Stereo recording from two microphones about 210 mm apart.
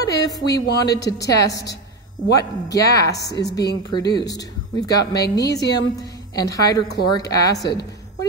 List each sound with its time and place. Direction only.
0.0 s a woman's voice: 15° left (ahead or behind)